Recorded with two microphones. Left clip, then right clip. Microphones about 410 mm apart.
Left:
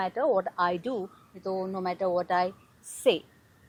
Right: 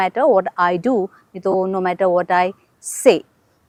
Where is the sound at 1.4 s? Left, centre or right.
Right.